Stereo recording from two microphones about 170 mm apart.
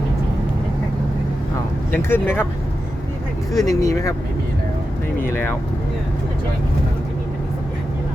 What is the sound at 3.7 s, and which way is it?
Speech, 20° left (ahead or behind).